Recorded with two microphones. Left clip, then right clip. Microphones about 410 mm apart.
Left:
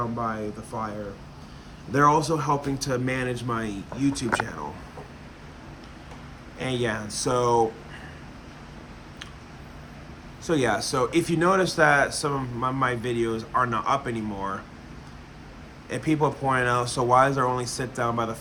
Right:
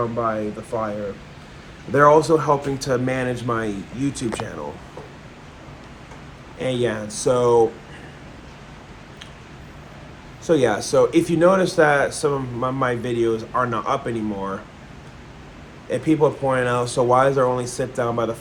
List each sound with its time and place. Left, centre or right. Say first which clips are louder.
1.9 s speech: right 7 dB; centre
6.6 s speech: right 5 dB; centre
10.4 s speech: right 6 dB; centre
15.9 s speech: right 6 dB; centre